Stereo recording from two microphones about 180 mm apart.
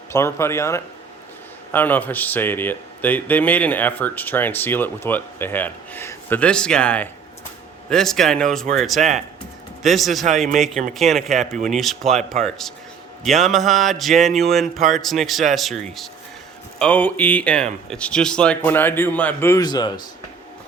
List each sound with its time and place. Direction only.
0.1 s speech: 15° left (ahead or behind)
9.0 s speech: 45° right (ahead or behind)
9.8 s speech: centre (ahead or behind); by 19.9 s 20° left (ahead or behind)